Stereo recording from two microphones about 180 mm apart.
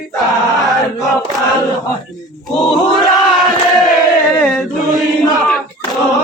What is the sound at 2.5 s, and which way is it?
Crowd, centre (ahead or behind).